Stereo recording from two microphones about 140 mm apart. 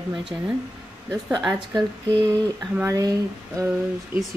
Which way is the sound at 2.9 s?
20° right (ahead or behind).